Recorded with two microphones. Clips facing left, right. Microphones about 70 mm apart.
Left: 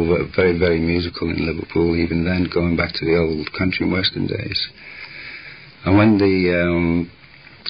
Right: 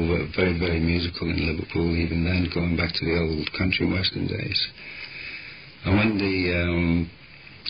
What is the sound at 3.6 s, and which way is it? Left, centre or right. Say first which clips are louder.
Speech: left 5 dB; left.